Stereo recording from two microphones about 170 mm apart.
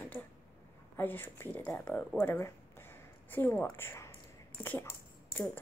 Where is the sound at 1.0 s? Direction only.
10° left (ahead or behind).